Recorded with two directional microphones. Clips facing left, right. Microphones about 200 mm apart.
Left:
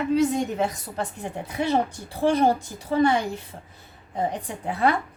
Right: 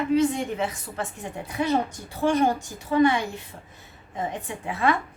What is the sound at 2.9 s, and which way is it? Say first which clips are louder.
A woman's voice: even; 35° left (ahead or behind).